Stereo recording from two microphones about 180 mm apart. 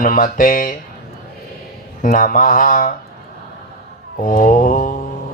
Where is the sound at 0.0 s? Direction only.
50° left (ahead or behind).